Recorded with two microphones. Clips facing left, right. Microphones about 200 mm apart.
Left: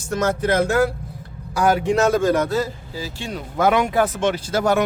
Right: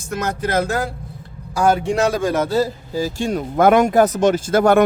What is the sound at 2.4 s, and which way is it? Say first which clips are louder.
Speech: right 3 dB; 30° right (ahead or behind).